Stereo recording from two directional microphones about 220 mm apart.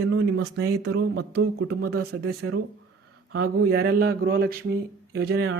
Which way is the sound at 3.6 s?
45° right (ahead or behind).